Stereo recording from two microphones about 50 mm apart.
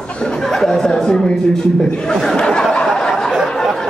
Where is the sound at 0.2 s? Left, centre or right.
Centre.